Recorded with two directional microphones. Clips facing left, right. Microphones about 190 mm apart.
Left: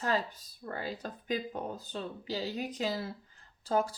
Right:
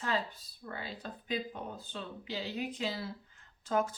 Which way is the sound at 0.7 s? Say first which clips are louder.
Left 4 dB; 45° left (ahead or behind).